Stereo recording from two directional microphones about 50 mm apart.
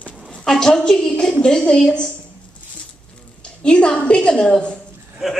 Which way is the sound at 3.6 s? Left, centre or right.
Centre.